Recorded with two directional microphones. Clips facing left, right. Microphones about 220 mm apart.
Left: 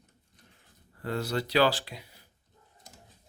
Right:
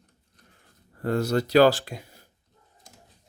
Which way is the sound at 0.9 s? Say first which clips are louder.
Right 7 dB; 45° right (ahead or behind).